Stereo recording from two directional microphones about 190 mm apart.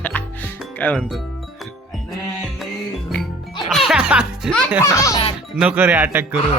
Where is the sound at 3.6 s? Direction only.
Centre (ahead or behind).